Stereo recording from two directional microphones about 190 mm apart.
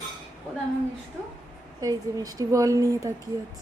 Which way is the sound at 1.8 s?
20° right (ahead or behind).